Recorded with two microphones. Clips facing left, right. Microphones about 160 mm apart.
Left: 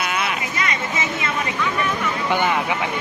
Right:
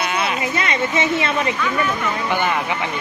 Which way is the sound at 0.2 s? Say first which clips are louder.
Right 3 dB; 30° right (ahead or behind).